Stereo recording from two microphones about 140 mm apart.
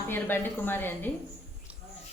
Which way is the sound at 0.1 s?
15° left (ahead or behind).